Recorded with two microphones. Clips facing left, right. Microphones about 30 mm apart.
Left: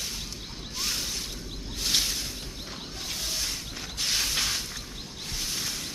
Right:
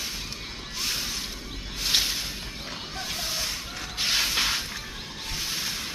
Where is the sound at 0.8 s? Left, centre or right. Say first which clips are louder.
Right 1 dB; centre.